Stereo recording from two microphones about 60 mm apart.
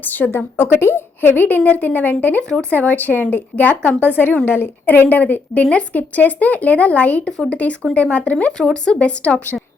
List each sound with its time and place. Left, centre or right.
0.0 s a woman's voice: left
2.5 s speech: centre
2.7 s a woman's voice: left